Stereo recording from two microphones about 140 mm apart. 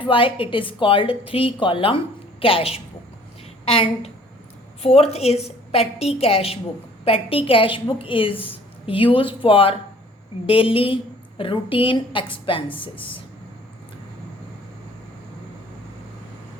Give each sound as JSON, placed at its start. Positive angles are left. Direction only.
{"t": 0.0, "sound": "a woman's voice", "side_deg": 40}